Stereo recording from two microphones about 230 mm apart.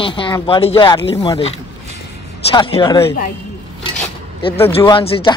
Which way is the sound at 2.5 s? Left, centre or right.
Left.